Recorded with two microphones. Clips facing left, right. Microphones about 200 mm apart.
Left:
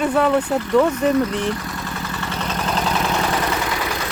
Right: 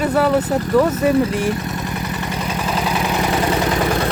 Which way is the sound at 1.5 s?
20° right (ahead or behind).